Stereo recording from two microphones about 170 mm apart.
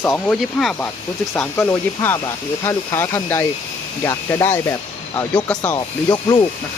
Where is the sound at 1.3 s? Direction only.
15° left (ahead or behind).